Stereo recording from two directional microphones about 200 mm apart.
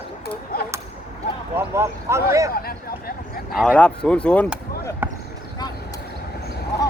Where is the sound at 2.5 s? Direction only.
50° left (ahead or behind).